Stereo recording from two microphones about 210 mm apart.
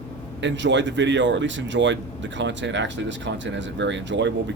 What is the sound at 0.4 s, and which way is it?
Speech, 60° right (ahead or behind).